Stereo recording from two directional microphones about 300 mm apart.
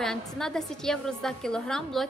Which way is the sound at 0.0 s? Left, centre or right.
Centre.